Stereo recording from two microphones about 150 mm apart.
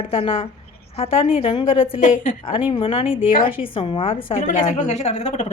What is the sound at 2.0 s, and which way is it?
Speech, 55° left (ahead or behind).